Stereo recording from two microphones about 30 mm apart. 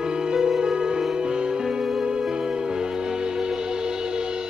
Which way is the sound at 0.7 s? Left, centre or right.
Right.